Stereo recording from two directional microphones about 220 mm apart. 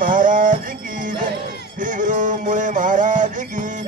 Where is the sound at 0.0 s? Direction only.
35° right (ahead or behind).